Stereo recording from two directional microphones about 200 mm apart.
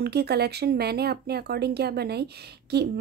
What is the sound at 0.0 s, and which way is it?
A woman's voice, 55° right (ahead or behind).